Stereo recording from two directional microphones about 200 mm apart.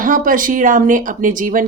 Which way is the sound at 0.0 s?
40° right (ahead or behind).